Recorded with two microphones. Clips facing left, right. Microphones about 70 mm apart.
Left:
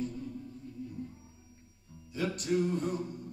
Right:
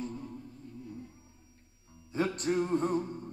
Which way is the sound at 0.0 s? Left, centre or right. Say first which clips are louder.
Left 2 dB; right.